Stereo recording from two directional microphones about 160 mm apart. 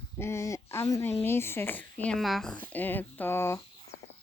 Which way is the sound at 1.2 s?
15° left (ahead or behind).